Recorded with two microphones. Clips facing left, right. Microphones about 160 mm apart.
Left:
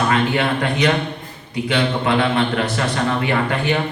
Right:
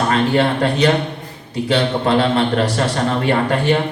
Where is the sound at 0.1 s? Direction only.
35° right (ahead or behind).